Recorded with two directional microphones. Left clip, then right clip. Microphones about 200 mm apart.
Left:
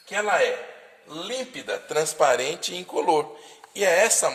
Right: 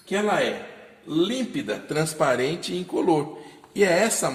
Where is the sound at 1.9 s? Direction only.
35° left (ahead or behind).